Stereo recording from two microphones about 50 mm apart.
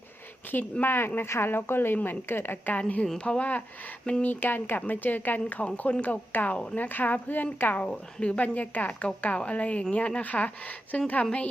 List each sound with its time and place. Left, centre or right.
0.5 s speech: left
2.7 s a woman's voice: left
4.2 s a woman's voice: left
5.6 s a woman's voice: left
7.8 s speech: left
8.5 s a woman's voice: left